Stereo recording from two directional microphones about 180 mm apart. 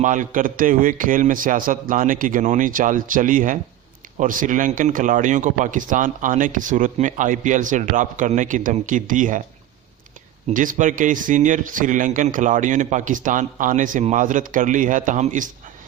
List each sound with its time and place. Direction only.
0.0 s a man's voice: 45° right (ahead or behind)
10.5 s a man's voice: 45° right (ahead or behind)